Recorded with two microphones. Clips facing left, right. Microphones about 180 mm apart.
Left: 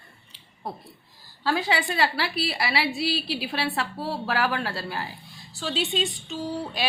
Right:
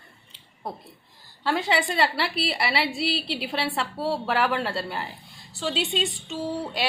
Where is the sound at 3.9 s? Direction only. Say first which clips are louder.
Right 2 dB; centre (ahead or behind).